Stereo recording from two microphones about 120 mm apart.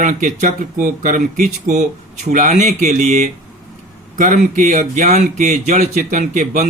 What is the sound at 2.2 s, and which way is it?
Speech, 90° right.